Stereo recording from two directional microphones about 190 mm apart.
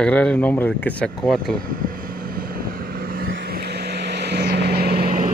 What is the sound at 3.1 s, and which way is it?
Vehicle, 50° right (ahead or behind).